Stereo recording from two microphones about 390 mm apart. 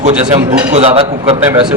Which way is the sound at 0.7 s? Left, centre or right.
Centre.